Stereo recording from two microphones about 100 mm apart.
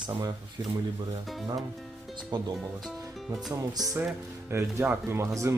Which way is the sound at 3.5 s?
40° right (ahead or behind).